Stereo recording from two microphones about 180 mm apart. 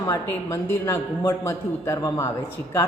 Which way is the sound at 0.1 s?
15° left (ahead or behind).